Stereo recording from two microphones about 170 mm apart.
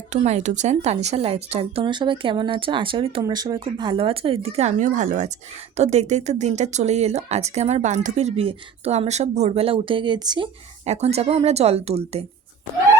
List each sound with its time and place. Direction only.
0.1 s speech: 45° right (ahead or behind); by 10.5 s 25° right (ahead or behind)
10.8 s speech: 40° right (ahead or behind)